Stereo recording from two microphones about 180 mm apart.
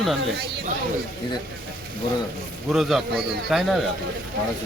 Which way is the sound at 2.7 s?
Centre (ahead or behind).